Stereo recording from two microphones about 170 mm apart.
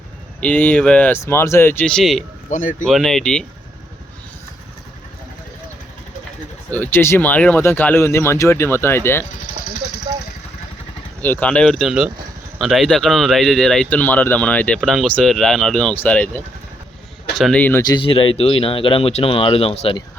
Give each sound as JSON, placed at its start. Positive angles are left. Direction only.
{"t": 0.4, "sound": "speech", "side_deg": 10}
{"t": 2.5, "sound": "speech", "side_deg": 50}
{"t": 2.8, "sound": "speech", "side_deg": 0}
{"t": 6.7, "sound": "speech", "side_deg": 10}
{"t": 11.2, "sound": "speech", "side_deg": 10}
{"t": 17.8, "sound": "speech", "side_deg": 30}